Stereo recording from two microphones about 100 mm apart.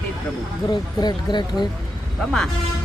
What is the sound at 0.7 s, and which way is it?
Speech, 45° left (ahead or behind).